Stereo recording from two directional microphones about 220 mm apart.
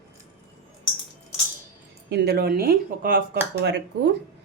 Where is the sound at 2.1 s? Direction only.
45° right (ahead or behind).